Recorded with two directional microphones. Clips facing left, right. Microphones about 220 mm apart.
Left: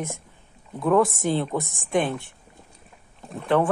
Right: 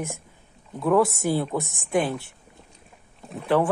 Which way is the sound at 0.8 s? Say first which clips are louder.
Even; centre (ahead or behind).